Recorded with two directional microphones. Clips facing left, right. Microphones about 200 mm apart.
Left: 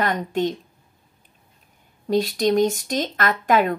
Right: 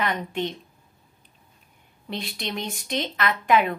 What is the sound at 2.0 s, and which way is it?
A woman's voice, 45° left (ahead or behind).